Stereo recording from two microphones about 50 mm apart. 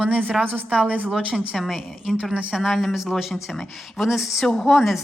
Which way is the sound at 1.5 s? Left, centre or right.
Centre.